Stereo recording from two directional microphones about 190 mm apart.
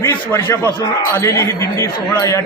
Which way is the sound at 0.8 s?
15° left (ahead or behind).